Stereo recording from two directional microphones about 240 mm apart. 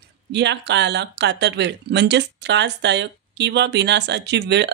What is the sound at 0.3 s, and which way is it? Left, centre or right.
Speech, right.